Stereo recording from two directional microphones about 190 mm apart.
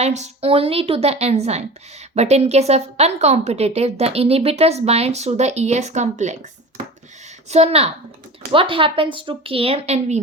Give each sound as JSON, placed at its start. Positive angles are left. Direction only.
{"t": 0.0, "sound": "a woman's voice", "side_deg": -35}
{"t": 7.5, "sound": "a woman's voice", "side_deg": -35}